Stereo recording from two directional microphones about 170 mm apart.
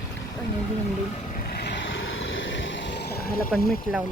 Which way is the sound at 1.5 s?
70° left (ahead or behind).